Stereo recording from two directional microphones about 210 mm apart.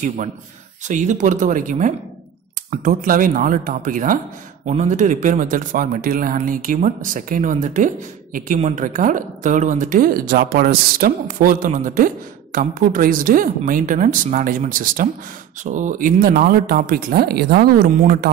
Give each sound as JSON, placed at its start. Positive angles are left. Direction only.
{"t": 0.8, "sound": "a man's voice", "side_deg": -35}